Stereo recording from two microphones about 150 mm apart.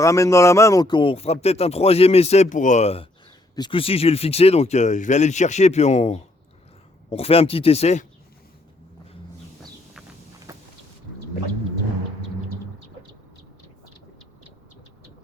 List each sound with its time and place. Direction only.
0.0 s speech: 20° left (ahead or behind); by 3.1 s 45° left (ahead or behind)
3.5 s speech: 30° left (ahead or behind)
10.5 s vehicle: 20° right (ahead or behind)